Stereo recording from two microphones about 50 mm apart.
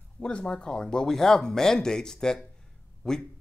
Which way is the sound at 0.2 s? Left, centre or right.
Left.